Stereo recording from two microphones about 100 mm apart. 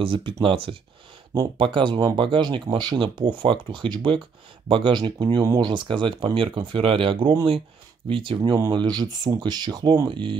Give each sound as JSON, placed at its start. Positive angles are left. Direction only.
{"t": 0.0, "sound": "speech", "side_deg": -60}
{"t": 5.7, "sound": "speech", "side_deg": -55}
{"t": 10.0, "sound": "speech", "side_deg": -55}